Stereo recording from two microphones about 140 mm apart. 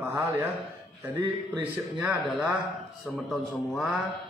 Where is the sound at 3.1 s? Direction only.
5° right (ahead or behind).